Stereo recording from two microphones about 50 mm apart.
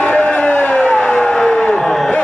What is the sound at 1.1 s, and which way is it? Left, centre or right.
Vehicle, centre.